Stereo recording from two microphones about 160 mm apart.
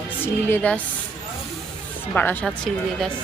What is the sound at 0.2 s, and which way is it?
Speech, 15° left (ahead or behind).